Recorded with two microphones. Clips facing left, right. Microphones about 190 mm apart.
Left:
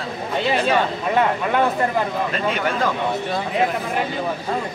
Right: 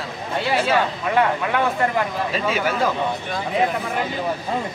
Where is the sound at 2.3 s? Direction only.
5° right (ahead or behind).